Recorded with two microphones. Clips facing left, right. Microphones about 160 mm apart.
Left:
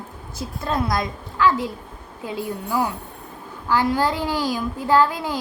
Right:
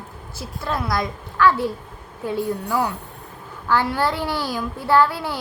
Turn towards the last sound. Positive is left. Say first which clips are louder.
# even
turn(degrees=15)  # may be behind; listen again after turning